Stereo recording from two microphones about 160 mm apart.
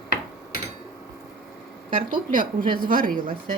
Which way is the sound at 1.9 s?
60° right (ahead or behind).